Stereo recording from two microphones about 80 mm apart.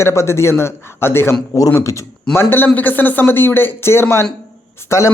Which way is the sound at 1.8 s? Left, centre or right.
Left.